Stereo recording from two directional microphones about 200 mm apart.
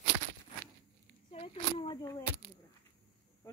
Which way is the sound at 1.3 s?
30° left (ahead or behind).